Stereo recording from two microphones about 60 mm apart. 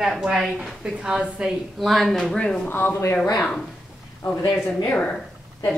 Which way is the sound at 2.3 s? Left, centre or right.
Centre.